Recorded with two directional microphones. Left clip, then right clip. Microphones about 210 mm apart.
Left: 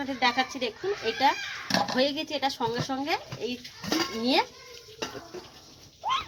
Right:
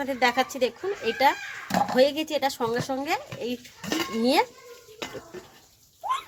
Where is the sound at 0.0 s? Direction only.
60° right (ahead or behind).